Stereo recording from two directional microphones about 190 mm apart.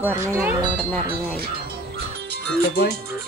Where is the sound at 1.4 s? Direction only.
55° right (ahead or behind).